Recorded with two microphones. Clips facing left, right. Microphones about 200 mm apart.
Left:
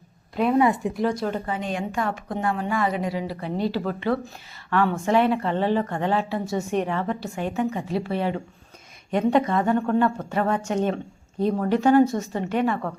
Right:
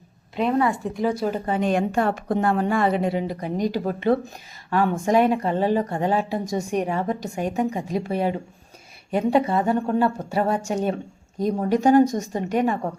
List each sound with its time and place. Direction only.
0.6 s speech: 15° left (ahead or behind)
1.2 s speech: 10° right (ahead or behind)
1.5 s a woman's voice: 50° right (ahead or behind)
1.9 s a woman's voice: 35° right (ahead or behind)
2.5 s a woman's voice: 50° right (ahead or behind)
2.7 s a woman's voice: 30° right (ahead or behind)